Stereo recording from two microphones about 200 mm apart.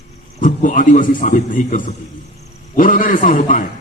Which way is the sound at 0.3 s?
40° left (ahead or behind).